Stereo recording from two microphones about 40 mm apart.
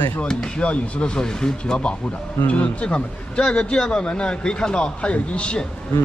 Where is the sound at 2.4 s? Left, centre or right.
Left.